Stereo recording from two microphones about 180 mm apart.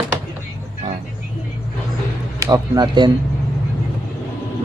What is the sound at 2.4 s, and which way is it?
Speech, 20° right (ahead or behind).